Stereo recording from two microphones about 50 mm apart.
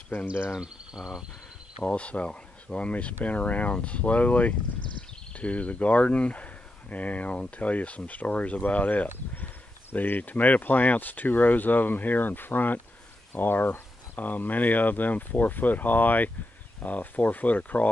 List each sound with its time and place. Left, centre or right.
0.6 s speech: centre
1.8 s speech: left